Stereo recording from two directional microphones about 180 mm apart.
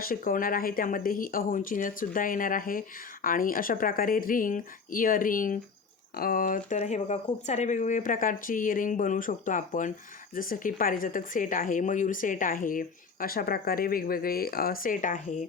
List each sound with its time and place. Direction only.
0.0 s speech: 50° left (ahead or behind)